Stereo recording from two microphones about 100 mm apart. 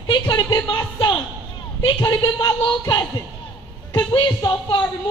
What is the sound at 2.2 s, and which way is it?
Speech, 55° left (ahead or behind).